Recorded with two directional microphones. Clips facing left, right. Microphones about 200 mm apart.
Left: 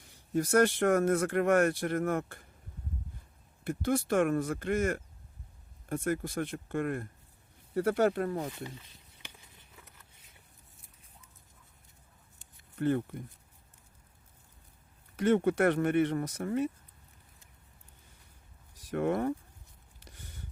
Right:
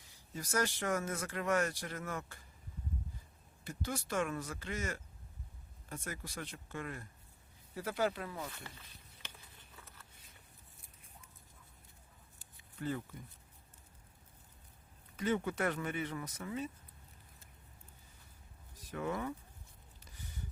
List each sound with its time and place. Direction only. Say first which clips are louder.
0.0 s speech: left 15 dB; 60° left (ahead or behind)
3.6 s speech: left 11 dB; 60° left (ahead or behind)
8.4 s speech: left 9 dB; 15° left (ahead or behind)
9.2 s a sound: left 2 dB; 15° left (ahead or behind)
12.8 s speech: left 10 dB; 60° left (ahead or behind)
15.2 s speech: left 9 dB; 60° left (ahead or behind)
18.9 s speech: left 9 dB; 60° left (ahead or behind)
20.1 s a sound: even; 65° left (ahead or behind)